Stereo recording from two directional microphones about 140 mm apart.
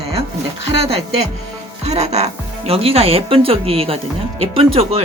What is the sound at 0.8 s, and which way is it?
Speech, 45° right (ahead or behind).